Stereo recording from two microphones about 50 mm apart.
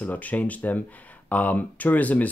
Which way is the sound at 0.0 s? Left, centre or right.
Left.